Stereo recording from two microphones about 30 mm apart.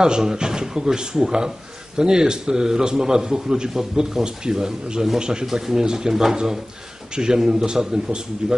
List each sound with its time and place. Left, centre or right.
0.0 s a man's voice: right
5.2 s a man's voice: right